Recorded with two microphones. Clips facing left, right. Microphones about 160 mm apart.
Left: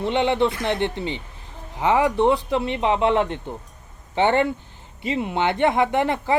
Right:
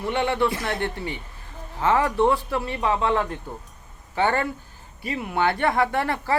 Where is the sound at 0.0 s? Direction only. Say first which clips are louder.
Left 3 dB; 20° left (ahead or behind).